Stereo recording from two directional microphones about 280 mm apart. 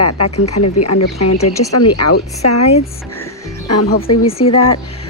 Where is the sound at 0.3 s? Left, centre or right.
Left.